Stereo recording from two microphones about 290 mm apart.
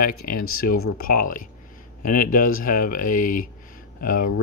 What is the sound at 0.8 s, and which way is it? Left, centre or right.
Speech, left.